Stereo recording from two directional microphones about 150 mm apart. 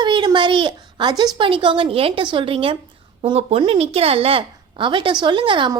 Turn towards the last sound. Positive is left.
turn(degrees=-35)  # may be behind; listen again after turning